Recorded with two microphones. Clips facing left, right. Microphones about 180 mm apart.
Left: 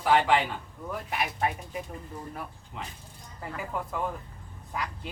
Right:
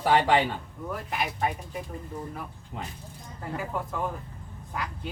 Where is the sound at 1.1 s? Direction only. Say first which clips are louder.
Even; centre (ahead or behind).